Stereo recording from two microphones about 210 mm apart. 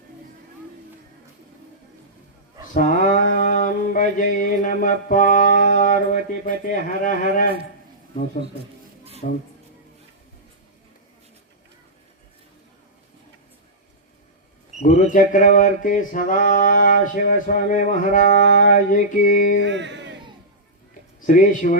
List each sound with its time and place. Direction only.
2.7 s mantra: 40° left (ahead or behind)
9.2 s mantra: 35° left (ahead or behind)
14.8 s a man's voice: 30° left (ahead or behind)
15.1 s mantra: 40° left (ahead or behind)
19.6 s a sound: 60° right (ahead or behind)
21.2 s speech: 40° left (ahead or behind)